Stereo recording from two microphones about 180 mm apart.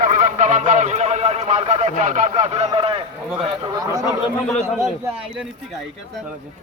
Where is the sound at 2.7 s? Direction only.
30° right (ahead or behind).